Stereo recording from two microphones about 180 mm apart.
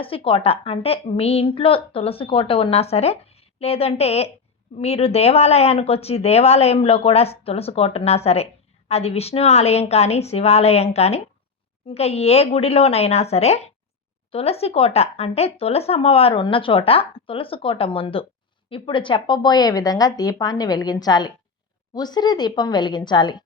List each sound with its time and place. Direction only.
0.0 s a woman's voice: 30° left (ahead or behind)